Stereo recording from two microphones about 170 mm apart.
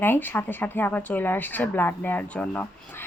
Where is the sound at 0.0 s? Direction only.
10° left (ahead or behind).